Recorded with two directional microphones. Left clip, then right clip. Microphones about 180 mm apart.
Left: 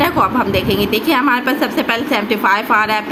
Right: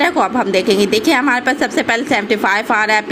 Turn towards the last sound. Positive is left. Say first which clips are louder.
# even
turn(degrees=-25)  # may be behind; listen again after turning